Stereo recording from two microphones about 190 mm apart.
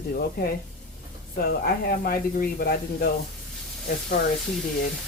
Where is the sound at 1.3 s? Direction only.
50° left (ahead or behind).